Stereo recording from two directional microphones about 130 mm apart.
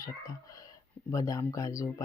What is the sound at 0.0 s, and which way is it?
Speech, 25° left (ahead or behind).